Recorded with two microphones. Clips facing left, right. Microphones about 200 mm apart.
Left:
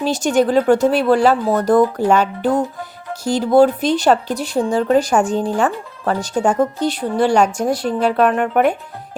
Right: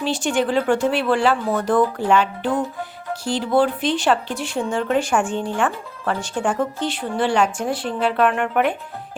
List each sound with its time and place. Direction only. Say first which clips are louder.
0.0 s speech: left 5 dB; 40° left (ahead or behind)